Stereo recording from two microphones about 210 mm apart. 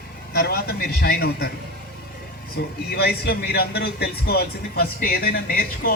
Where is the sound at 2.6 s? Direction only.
50° left (ahead or behind).